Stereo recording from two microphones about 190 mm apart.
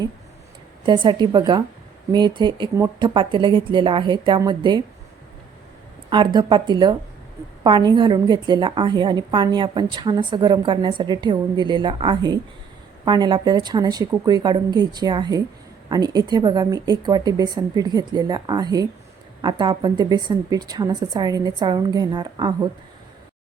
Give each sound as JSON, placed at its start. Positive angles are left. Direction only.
{"t": 0.9, "sound": "a woman's voice", "side_deg": -25}
{"t": 6.1, "sound": "a woman's voice", "side_deg": -25}